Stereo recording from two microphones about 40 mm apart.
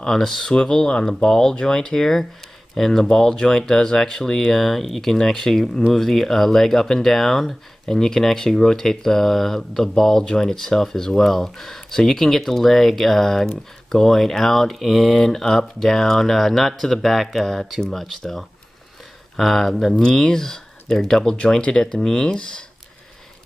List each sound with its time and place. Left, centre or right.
0.0 s speech: centre
5.1 s speech: centre
19.3 s speech: centre
20.0 s speech: centre
21.5 s speech: left